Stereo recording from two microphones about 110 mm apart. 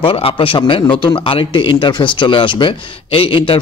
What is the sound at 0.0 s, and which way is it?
Speech, 55° left (ahead or behind).